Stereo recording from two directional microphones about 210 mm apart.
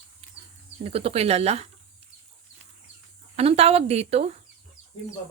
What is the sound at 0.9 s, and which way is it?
Speech, 30° right (ahead or behind).